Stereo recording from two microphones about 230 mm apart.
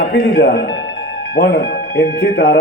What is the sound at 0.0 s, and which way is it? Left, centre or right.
A man's voice, left.